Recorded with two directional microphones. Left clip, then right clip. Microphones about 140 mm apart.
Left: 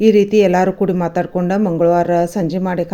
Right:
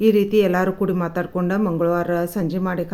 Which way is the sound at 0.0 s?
25° left (ahead or behind).